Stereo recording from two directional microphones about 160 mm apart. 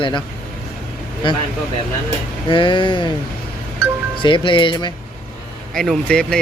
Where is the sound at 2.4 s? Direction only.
30° left (ahead or behind).